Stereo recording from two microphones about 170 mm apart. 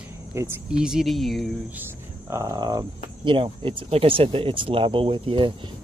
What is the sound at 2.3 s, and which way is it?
Speech, 20° right (ahead or behind).